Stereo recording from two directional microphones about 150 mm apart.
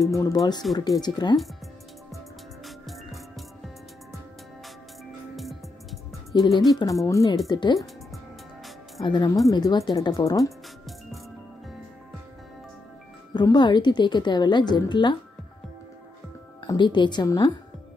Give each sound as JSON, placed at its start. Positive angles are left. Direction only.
{"t": 0.0, "sound": "a woman's voice", "side_deg": 25}
{"t": 2.6, "sound": "music", "side_deg": 0}
{"t": 5.3, "sound": "music", "side_deg": 0}
{"t": 6.3, "sound": "a woman's voice", "side_deg": 30}
{"t": 7.7, "sound": "music", "side_deg": 0}
{"t": 9.0, "sound": "a woman's voice", "side_deg": 30}
{"t": 13.3, "sound": "a woman's voice", "side_deg": 30}
{"t": 16.6, "sound": "a woman's voice", "side_deg": 30}